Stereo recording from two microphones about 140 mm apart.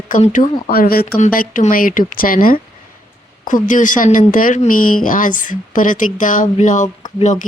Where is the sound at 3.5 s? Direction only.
70° left (ahead or behind).